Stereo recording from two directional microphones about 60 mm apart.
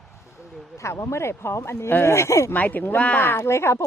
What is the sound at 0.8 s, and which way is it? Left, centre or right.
A woman's voice, left.